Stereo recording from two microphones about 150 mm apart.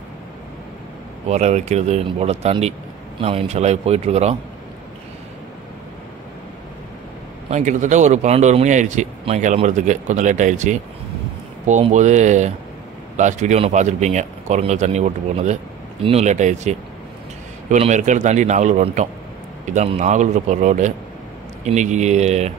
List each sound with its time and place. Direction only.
1.3 s speech: 50° right (ahead or behind)
7.4 s speech: 55° right (ahead or behind)
11.9 s a man's voice: 50° right (ahead or behind)